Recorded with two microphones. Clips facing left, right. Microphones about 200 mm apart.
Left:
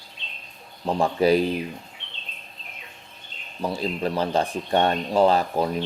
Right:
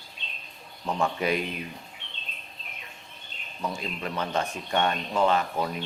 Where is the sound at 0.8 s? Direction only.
30° left (ahead or behind).